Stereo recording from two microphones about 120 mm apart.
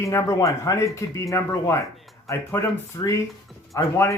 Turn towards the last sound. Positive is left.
turn(degrees=25)  # may be behind; listen again after turning